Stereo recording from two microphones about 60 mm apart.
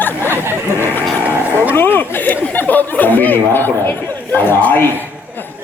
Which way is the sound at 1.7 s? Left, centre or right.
Left.